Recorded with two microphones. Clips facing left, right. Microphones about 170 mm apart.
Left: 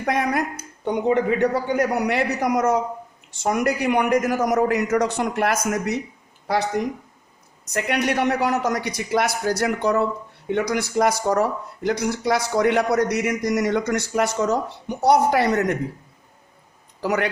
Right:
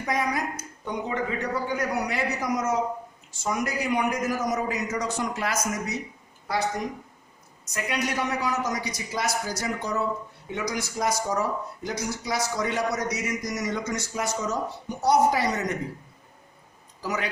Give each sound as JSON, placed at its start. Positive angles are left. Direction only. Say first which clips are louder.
{"t": 0.0, "sound": "a man's voice", "louder": "left 5 dB", "side_deg": 60}
{"t": 7.6, "sound": "speech", "louder": "left 6 dB", "side_deg": 65}
{"t": 17.0, "sound": "speech", "louder": "left 8 dB", "side_deg": 65}